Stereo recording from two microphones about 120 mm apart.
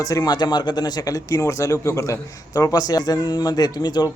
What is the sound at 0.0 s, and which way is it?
Speech, 30° left (ahead or behind).